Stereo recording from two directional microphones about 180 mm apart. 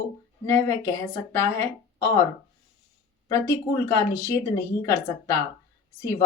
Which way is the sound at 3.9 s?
15° left (ahead or behind).